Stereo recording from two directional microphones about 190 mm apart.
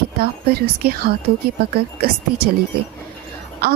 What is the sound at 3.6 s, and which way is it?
Speech, 55° right (ahead or behind).